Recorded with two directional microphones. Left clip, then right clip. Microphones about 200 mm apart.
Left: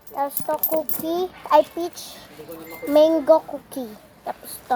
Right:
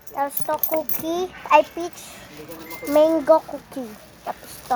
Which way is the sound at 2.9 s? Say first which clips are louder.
Left 1 dB; 5° right (ahead or behind).